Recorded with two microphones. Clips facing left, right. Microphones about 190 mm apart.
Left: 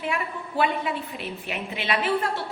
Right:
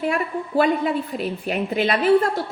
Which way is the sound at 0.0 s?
40° right (ahead or behind).